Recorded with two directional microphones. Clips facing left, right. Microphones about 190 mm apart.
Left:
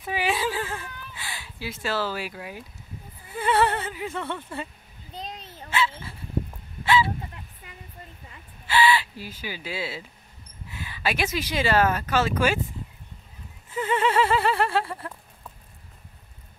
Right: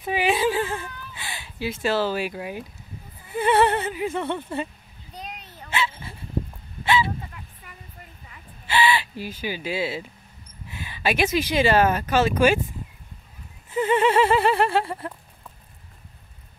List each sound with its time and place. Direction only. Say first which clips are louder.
0.0 s whimper: right 4 dB; 20° right (ahead or behind)
3.3 s speech: right 3 dB; 20° right (ahead or behind)
5.1 s a sound: left 1 dB; 25° left (ahead or behind)
5.7 s dog: left 1 dB; 20° right (ahead or behind)
6.8 s honk: even; 20° right (ahead or behind)
8.6 s speech: even; 20° right (ahead or behind)
10.7 s a sound: right 3 dB; 20° right (ahead or behind)
11.3 s speech: right 3 dB; 20° right (ahead or behind)
13.7 s speech: right 4 dB; 20° right (ahead or behind)